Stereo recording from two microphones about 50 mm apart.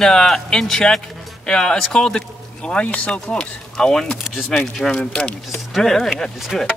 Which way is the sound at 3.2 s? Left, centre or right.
Centre.